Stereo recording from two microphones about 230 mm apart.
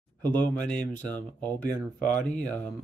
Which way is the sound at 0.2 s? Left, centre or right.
Centre.